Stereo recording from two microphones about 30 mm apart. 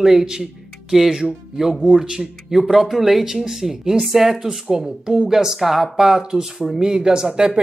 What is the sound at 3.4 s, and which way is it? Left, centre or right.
Speech, centre.